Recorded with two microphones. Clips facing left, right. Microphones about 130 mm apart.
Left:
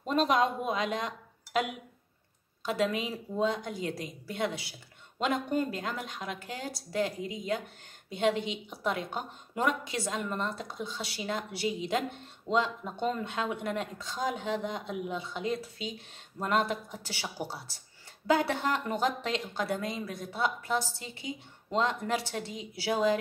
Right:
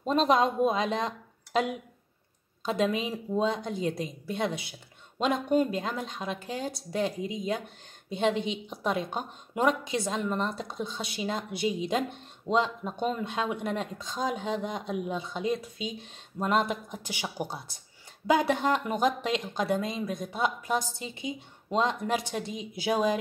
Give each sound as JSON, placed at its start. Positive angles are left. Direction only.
{"t": 0.0, "sound": "speech", "side_deg": -25}